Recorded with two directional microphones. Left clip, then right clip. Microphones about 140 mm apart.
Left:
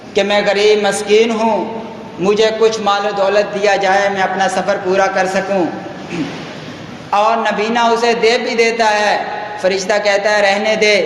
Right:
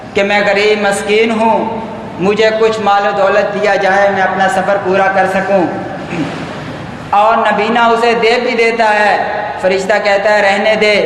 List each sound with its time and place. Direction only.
0.2 s a man's voice: 50° left (ahead or behind)
7.1 s a man's voice: 40° left (ahead or behind)